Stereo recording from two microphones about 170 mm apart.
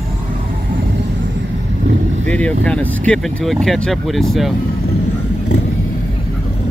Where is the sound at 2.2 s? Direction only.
5° left (ahead or behind).